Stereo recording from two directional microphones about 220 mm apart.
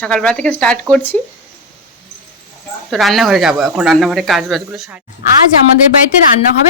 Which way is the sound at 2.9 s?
Centre (ahead or behind).